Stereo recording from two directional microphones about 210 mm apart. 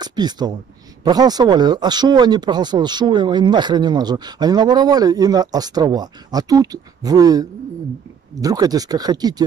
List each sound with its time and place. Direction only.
0.0 s speech: 20° right (ahead or behind)